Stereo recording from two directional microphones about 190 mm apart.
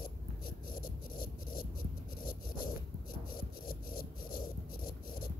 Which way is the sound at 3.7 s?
50° left (ahead or behind).